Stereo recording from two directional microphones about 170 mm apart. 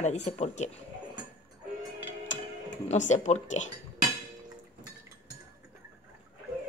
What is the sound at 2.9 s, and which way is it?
Speech, 45° left (ahead or behind).